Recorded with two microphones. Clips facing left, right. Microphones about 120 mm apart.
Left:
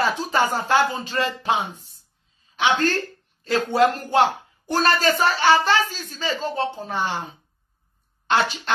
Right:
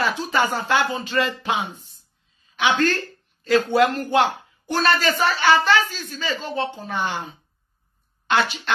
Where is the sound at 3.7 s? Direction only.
40° left (ahead or behind).